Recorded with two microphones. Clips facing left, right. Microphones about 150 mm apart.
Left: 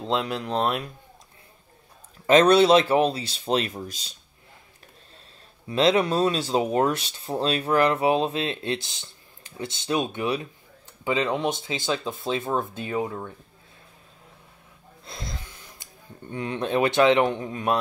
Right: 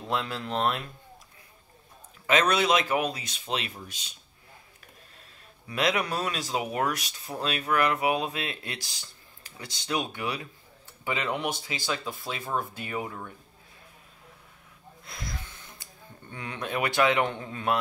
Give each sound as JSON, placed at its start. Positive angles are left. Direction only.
{"t": 0.0, "sound": "speech", "side_deg": 20}
{"t": 2.2, "sound": "speech", "side_deg": 35}
{"t": 5.7, "sound": "speech", "side_deg": 25}
{"t": 15.0, "sound": "speech", "side_deg": 25}